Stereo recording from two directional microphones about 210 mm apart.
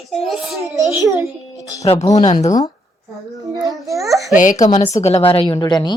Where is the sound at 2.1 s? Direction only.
35° left (ahead or behind).